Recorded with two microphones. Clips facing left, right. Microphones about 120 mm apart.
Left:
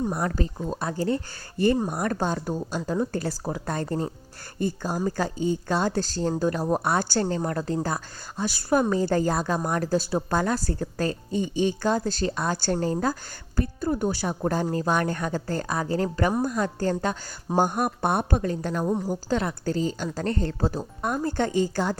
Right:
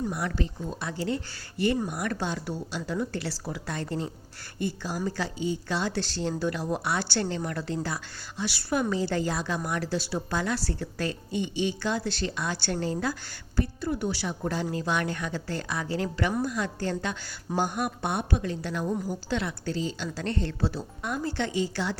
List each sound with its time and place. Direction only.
0.1 s speech: 40° left (ahead or behind)